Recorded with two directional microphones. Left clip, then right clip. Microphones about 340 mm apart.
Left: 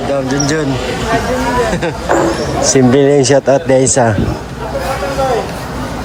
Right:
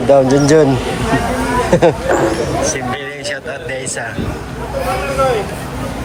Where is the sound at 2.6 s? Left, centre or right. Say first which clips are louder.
Left 10 dB; left.